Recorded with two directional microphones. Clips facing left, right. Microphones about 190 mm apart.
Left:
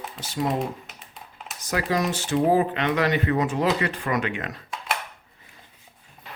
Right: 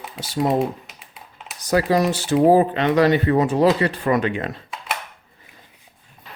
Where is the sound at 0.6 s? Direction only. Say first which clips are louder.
Right 6 dB; 5° right (ahead or behind).